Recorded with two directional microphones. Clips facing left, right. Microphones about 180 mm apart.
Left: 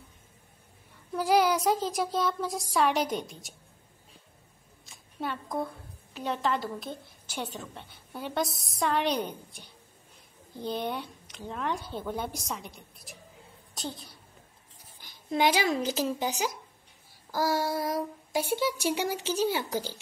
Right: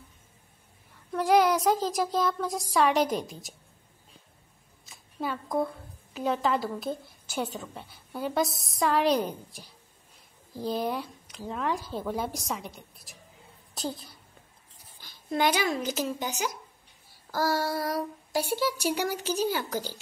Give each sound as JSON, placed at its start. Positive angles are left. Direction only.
{"t": 0.9, "sound": "a woman's voice", "side_deg": 0}
{"t": 4.8, "sound": "a sound", "side_deg": 0}
{"t": 6.1, "sound": "a woman's voice", "side_deg": 0}
{"t": 15.3, "sound": "speech", "side_deg": 25}
{"t": 17.3, "sound": "speech", "side_deg": 15}